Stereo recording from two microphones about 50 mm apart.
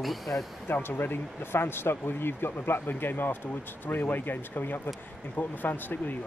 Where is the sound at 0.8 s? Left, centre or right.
Left.